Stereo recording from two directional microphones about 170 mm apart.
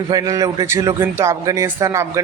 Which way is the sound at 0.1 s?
20° right (ahead or behind).